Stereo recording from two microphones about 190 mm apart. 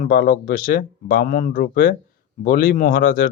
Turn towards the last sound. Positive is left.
turn(degrees=50)  # may be behind; listen again after turning